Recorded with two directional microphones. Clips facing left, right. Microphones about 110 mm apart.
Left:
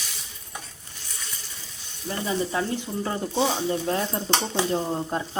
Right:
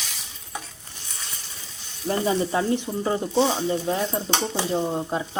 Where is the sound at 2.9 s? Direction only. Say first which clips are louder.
Right 3 dB; 20° right (ahead or behind).